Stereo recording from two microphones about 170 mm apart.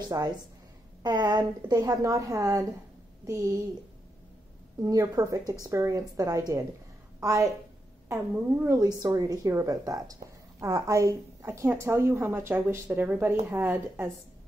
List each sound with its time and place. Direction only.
0.1 s a woman's voice: 20° right (ahead or behind)
4.8 s a woman's voice: 20° right (ahead or behind)
8.6 s a woman's voice: 20° right (ahead or behind)